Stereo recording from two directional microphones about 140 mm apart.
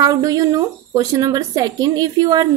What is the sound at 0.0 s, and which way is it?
A woman's voice, 25° right (ahead or behind).